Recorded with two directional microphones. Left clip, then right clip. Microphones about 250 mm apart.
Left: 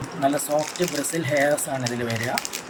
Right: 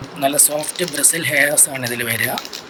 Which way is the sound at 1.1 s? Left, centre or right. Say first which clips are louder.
Right 5 dB; centre.